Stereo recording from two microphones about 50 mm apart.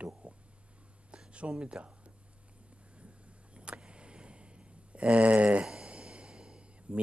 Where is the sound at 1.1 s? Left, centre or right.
Right.